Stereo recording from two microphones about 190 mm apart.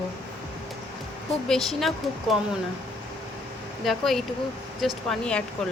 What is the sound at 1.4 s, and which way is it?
Speech, centre (ahead or behind).